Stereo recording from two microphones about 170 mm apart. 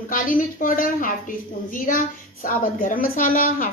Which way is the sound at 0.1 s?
55° left (ahead or behind).